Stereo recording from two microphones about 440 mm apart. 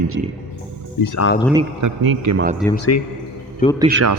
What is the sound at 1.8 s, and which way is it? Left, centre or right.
Speech, right.